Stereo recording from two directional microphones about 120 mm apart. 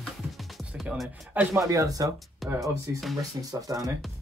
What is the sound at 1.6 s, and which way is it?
Speech, 25° right (ahead or behind).